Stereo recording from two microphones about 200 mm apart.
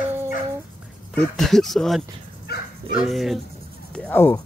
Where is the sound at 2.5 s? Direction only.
50° left (ahead or behind).